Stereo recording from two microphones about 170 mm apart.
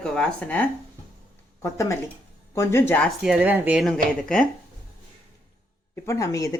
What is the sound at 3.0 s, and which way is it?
Speech, 5° right (ahead or behind).